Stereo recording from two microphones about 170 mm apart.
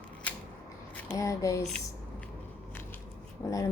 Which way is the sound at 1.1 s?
20° left (ahead or behind).